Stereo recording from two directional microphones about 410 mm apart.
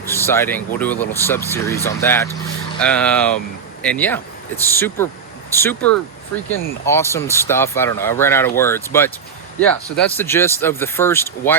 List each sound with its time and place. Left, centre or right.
0.0 s speech: centre